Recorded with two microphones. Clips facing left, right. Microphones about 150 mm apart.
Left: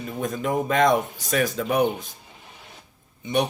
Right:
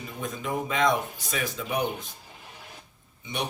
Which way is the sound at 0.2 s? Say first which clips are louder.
Left 6 dB; 50° left (ahead or behind).